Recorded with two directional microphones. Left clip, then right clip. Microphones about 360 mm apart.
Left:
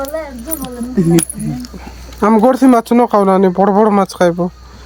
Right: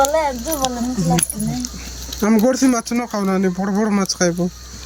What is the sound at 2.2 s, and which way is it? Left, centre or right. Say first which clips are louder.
Speech: left 6 dB; centre.